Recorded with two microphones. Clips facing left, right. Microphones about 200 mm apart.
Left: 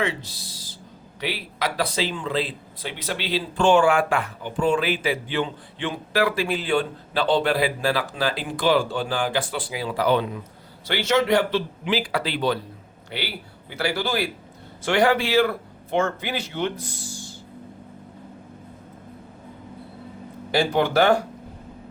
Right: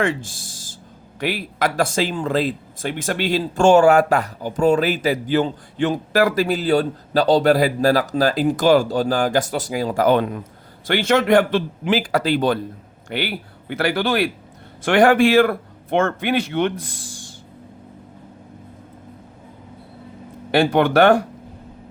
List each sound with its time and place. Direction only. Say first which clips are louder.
0.0 s a sound: right 5 dB; 50° right (ahead or behind)
1.2 s a man's voice: right 6 dB; 50° right (ahead or behind)
20.5 s a man's voice: right 5 dB; 60° right (ahead or behind)